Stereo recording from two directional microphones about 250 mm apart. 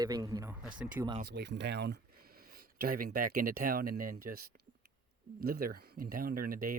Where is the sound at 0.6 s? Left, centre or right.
Centre.